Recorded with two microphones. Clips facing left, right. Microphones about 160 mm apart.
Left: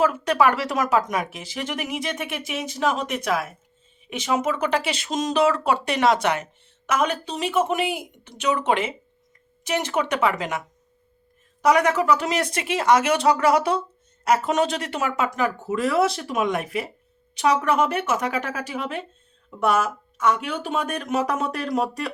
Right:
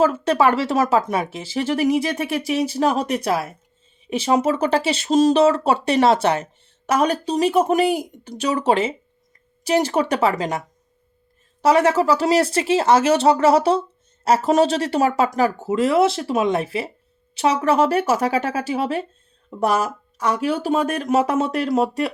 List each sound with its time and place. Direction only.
0.0 s speech: 30° right (ahead or behind)
11.6 s speech: 30° right (ahead or behind)